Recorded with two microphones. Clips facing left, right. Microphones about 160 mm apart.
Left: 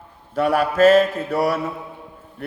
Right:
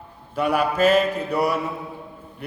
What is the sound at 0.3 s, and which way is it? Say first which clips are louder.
Mantra: left 3 dB; 45° left (ahead or behind).